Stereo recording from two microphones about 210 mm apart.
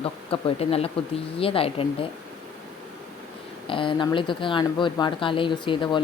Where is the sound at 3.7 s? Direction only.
25° left (ahead or behind).